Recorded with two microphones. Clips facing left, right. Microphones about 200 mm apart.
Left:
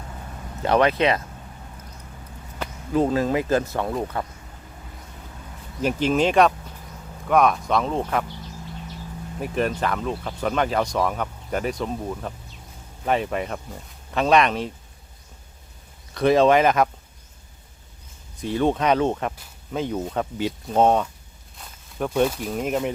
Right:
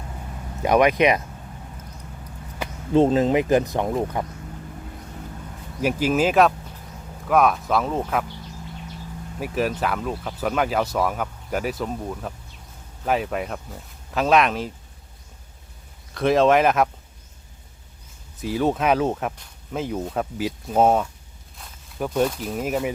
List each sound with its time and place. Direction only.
0.6 s speech: 15° right (ahead or behind)
2.9 s speech: 25° right (ahead or behind)
5.8 s speech: 5° right (ahead or behind)
9.4 s speech: 5° right (ahead or behind)
16.1 s speech: centre (ahead or behind)
18.3 s speech: 5° right (ahead or behind)